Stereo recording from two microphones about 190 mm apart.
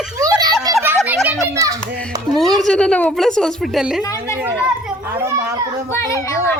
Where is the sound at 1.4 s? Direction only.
15° right (ahead or behind).